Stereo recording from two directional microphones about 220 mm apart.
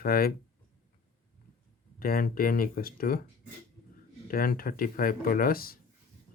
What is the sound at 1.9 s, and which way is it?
Speech, 40° left (ahead or behind).